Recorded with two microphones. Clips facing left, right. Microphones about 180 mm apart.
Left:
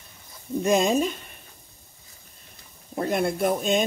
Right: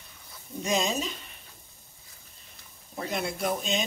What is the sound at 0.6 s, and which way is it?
Speech, 55° left (ahead or behind).